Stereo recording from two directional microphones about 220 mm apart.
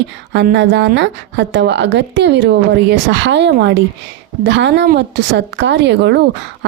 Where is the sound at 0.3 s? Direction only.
55° right (ahead or behind).